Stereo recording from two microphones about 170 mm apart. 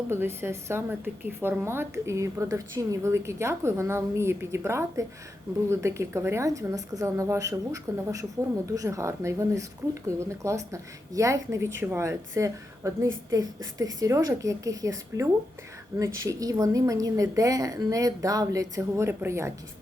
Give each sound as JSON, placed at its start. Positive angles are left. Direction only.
{"t": 0.1, "sound": "a woman's voice", "side_deg": -15}